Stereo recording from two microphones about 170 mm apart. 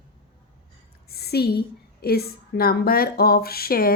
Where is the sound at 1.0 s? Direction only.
65° left (ahead or behind).